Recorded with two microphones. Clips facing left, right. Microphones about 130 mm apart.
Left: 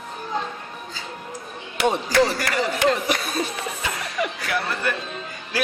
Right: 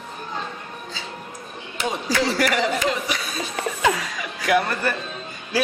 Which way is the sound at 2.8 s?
55° left (ahead or behind).